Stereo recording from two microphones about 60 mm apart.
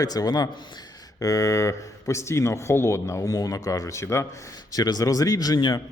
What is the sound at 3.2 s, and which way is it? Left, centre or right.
Speech, left.